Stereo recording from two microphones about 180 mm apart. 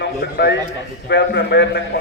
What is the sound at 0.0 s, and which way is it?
A man's voice, 70° left (ahead or behind).